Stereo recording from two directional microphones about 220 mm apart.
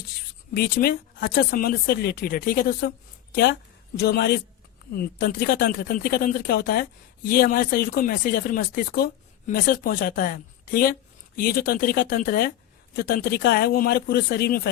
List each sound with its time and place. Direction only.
0.5 s a woman's voice: 45° left (ahead or behind)